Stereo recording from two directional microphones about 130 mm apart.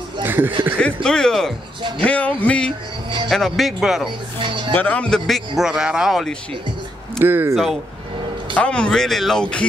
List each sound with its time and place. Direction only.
0.2 s music: 15° right (ahead or behind)
1.0 s speech: 5° left (ahead or behind)
1.8 s speech: 40° right (ahead or behind)
2.0 s speech: 10° left (ahead or behind)
4.4 s speech: 40° right (ahead or behind)
4.7 s speech: 10° left (ahead or behind)
7.2 s speech: 20° right (ahead or behind)
7.5 s speech: centre (ahead or behind)